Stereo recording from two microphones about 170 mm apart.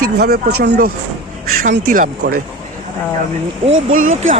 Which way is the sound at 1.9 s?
55° right (ahead or behind).